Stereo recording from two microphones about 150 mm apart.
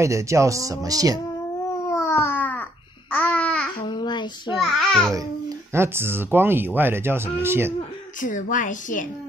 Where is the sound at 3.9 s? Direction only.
30° left (ahead or behind).